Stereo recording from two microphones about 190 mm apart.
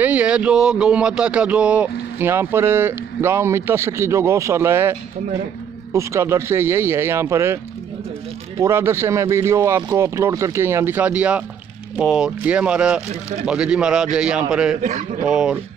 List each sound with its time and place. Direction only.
0.0 s speech: 5° right (ahead or behind)
5.9 s speech: 15° right (ahead or behind)
8.5 s speech: 15° right (ahead or behind)
14.8 s speech: 40° right (ahead or behind)
15.2 s speech: 5° right (ahead or behind)